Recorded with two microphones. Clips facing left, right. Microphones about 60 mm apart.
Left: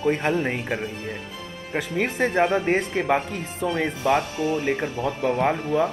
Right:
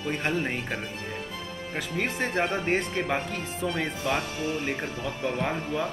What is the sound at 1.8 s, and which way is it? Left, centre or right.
Speech, centre.